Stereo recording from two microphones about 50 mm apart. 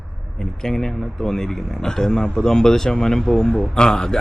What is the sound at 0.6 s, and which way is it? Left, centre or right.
Speech, centre.